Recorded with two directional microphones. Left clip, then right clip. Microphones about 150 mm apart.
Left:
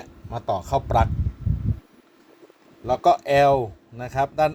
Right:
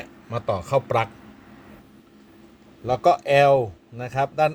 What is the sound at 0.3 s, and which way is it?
Speech, 10° right (ahead or behind).